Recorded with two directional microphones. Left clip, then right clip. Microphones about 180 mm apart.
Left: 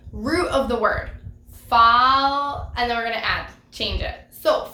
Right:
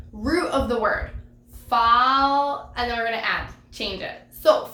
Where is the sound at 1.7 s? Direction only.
15° left (ahead or behind).